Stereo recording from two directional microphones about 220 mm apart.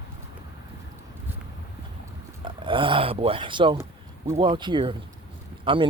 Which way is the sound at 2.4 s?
25° right (ahead or behind).